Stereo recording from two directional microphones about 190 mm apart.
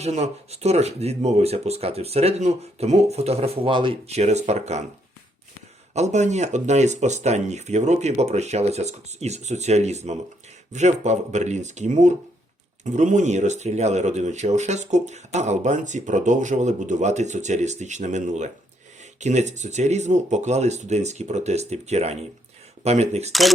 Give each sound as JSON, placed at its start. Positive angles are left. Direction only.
{"t": 0.0, "sound": "speech", "side_deg": -35}
{"t": 5.9, "sound": "speech", "side_deg": -35}